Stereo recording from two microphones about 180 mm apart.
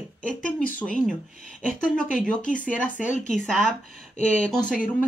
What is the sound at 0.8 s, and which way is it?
Speech, 5° left (ahead or behind).